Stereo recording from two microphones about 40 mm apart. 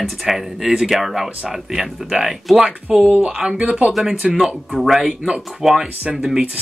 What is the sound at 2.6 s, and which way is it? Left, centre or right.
Speech, right.